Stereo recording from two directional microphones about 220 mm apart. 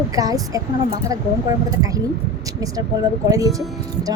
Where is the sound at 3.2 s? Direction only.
15° right (ahead or behind).